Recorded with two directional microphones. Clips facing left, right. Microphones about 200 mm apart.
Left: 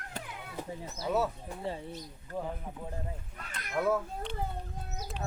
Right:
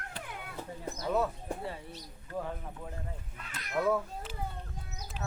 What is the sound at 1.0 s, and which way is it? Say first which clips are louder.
Speech: even; 5° left (ahead or behind).